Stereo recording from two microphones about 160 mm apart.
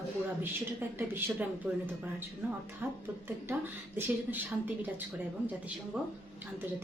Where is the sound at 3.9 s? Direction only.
10° right (ahead or behind).